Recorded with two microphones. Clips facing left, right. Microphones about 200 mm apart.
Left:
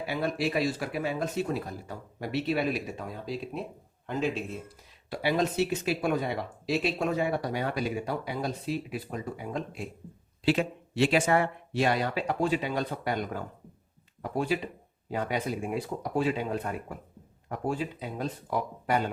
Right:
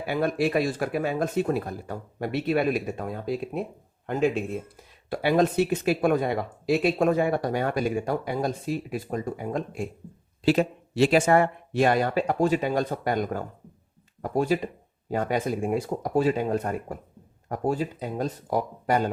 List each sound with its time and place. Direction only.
0.0 s speech: 55° right (ahead or behind)